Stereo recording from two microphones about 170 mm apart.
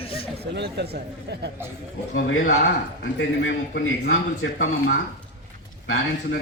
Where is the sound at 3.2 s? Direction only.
90° left.